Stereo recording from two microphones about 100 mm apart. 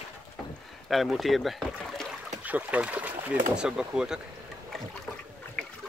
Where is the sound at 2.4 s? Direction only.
15° right (ahead or behind).